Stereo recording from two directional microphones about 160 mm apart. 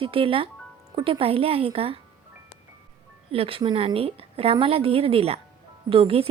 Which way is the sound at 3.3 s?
35° right (ahead or behind).